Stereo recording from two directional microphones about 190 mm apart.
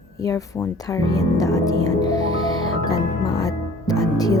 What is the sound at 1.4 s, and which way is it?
Speech, 20° left (ahead or behind).